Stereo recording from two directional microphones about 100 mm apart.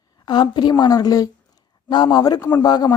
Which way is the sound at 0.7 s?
40° left (ahead or behind).